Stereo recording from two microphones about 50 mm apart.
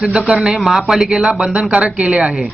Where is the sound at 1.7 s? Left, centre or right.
Centre.